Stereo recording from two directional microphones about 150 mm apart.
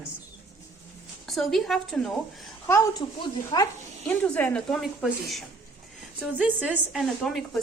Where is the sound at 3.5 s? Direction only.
35° left (ahead or behind).